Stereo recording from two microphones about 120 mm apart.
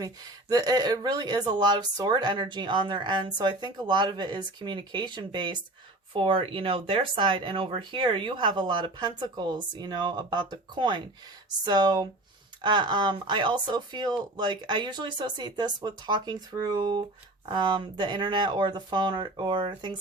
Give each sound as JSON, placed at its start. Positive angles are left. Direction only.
{"t": 0.0, "sound": "speech", "side_deg": -35}